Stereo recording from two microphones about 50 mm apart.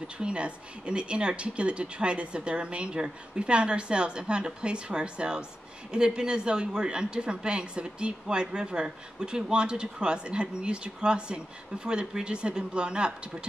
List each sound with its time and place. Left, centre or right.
0.2 s a woman's voice: right